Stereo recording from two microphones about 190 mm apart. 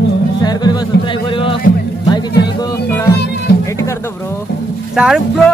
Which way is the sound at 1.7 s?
75° left (ahead or behind).